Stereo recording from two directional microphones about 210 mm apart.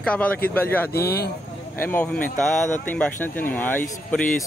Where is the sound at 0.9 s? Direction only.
50° left (ahead or behind).